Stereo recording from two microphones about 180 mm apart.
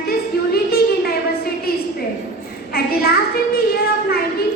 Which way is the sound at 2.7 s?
60° left (ahead or behind).